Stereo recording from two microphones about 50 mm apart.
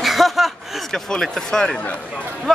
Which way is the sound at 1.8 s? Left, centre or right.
Left.